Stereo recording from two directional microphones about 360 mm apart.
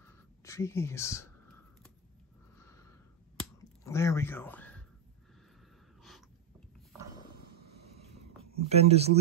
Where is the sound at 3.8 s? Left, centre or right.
Centre.